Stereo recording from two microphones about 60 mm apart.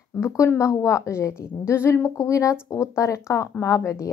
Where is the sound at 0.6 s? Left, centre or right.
Left.